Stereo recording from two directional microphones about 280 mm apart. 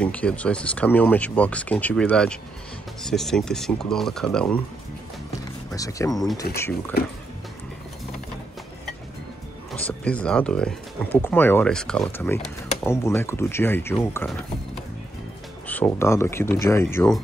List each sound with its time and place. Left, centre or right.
0.0 s speech: centre
5.8 s speech: centre
6.4 s speech: left
9.7 s speech: centre
15.6 s speech: centre